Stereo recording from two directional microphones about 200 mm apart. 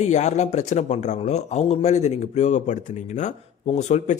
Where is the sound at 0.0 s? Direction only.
35° left (ahead or behind).